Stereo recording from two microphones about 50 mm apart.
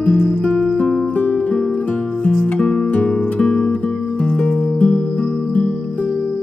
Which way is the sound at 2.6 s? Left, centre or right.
Centre.